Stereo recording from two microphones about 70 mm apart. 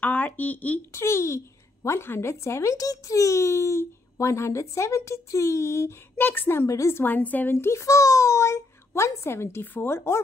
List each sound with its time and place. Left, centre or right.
0.0 s a sound: left
0.9 s a child's voice: left
7.5 s a child's voice: left